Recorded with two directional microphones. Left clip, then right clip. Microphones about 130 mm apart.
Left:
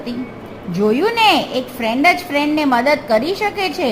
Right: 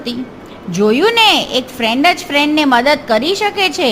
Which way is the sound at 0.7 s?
70° right (ahead or behind).